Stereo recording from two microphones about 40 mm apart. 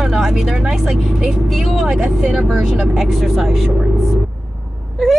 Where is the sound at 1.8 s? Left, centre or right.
Right.